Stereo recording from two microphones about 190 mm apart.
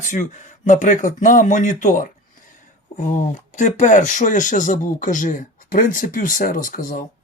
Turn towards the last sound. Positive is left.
turn(degrees=45)  # may be behind; listen again after turning